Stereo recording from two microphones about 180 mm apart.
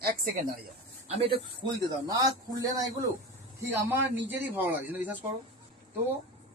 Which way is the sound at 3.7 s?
10° right (ahead or behind).